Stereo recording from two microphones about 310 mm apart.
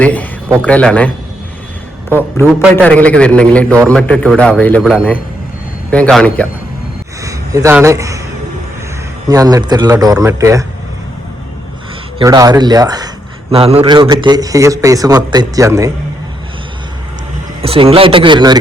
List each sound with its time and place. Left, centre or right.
0.0 s a sound: centre
0.6 s a man's voice: centre
2.1 s a man's voice: centre
7.2 s a man's voice: centre
9.3 s a man's voice: centre
12.2 s a man's voice: centre
17.6 s a man's voice: centre